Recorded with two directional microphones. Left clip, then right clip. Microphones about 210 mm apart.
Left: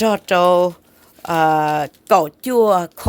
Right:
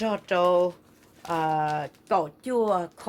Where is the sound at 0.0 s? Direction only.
60° left (ahead or behind).